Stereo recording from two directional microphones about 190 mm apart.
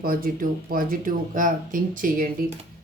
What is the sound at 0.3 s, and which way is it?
Speech, 50° right (ahead or behind).